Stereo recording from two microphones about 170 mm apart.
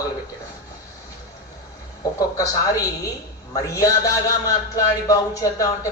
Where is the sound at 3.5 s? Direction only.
20° left (ahead or behind).